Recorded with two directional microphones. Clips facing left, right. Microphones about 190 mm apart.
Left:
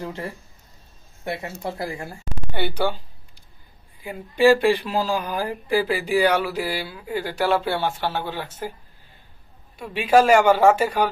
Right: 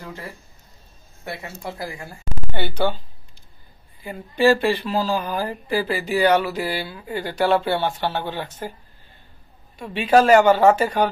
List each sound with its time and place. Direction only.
1.2 s speech: 25° left (ahead or behind)
2.5 s speech: 10° left (ahead or behind)
4.0 s speech: 10° left (ahead or behind)
9.8 s speech: 10° left (ahead or behind)